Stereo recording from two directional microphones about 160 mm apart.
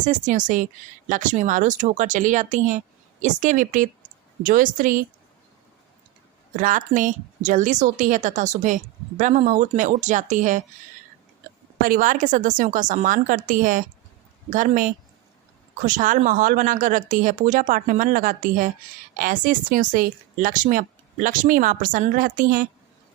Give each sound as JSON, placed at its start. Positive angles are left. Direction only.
{"t": 0.0, "sound": "a woman's voice", "side_deg": -50}
{"t": 6.6, "sound": "a woman's voice", "side_deg": -55}
{"t": 11.8, "sound": "a woman's voice", "side_deg": -60}